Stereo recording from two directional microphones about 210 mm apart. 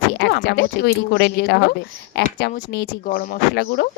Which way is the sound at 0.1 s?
55° left (ahead or behind).